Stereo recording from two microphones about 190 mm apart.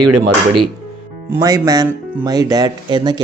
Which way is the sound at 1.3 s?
20° right (ahead or behind).